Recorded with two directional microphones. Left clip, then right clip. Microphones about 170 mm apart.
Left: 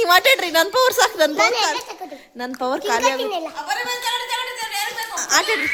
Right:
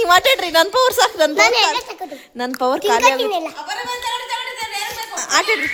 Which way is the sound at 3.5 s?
40° left (ahead or behind).